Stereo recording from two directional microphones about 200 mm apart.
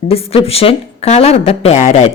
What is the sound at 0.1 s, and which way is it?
A woman's voice, 30° left (ahead or behind).